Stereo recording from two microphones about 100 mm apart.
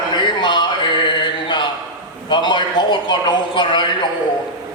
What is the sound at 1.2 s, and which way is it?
Mantra, 50° left (ahead or behind).